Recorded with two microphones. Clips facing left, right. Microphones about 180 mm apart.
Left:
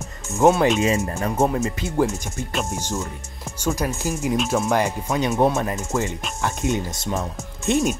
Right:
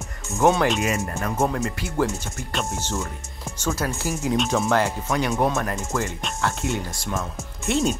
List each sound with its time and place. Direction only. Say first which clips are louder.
0.7 s speech: left 4 dB; 25° left (ahead or behind)
4.3 s speech: even; 5° left (ahead or behind)